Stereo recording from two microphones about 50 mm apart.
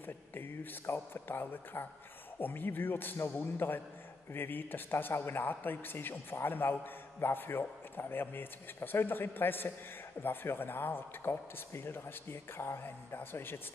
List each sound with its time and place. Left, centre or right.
0.0 s speech: left